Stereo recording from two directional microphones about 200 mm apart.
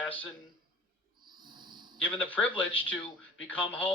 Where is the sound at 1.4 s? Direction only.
20° right (ahead or behind).